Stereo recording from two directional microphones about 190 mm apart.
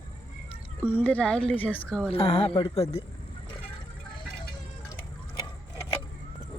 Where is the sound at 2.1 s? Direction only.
30° left (ahead or behind).